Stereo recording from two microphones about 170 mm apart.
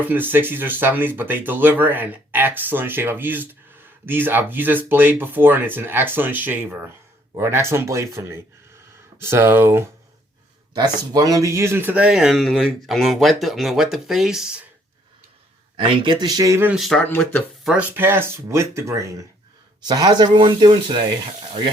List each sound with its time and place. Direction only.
0.0 s speech: 10° right (ahead or behind)
10.8 s speech: 25° right (ahead or behind); by 14.6 s 5° right (ahead or behind)
16.2 s speech: 20° right (ahead or behind)
16.7 s speech: centre (ahead or behind); by 21.0 s 30° right (ahead or behind)